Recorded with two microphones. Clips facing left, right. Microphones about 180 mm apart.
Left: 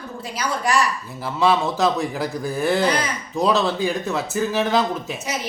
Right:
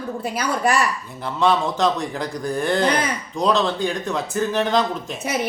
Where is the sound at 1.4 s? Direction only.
5° left (ahead or behind).